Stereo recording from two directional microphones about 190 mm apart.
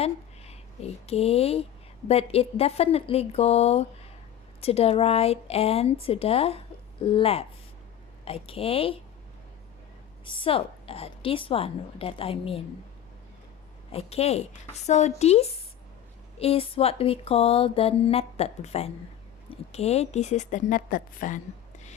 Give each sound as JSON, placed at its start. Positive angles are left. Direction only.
{"t": 0.0, "sound": "speech", "side_deg": 35}
{"t": 2.0, "sound": "mantra", "side_deg": 30}
{"t": 7.0, "sound": "a woman's voice", "side_deg": 30}
{"t": 10.2, "sound": "a woman's voice", "side_deg": 25}
{"t": 13.9, "sound": "mantra", "side_deg": 35}